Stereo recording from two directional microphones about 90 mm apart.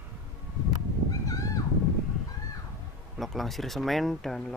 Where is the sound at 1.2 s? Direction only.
40° left (ahead or behind).